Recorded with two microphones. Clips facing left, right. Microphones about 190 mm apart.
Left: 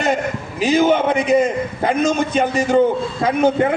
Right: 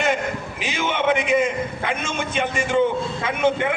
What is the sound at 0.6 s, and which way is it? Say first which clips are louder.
A man's voice: left 9 dB; 40° left (ahead or behind).